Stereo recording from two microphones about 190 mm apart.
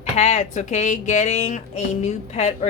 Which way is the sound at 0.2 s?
35° left (ahead or behind).